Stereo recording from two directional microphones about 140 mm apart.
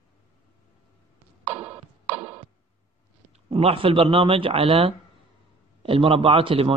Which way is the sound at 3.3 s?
45° right (ahead or behind).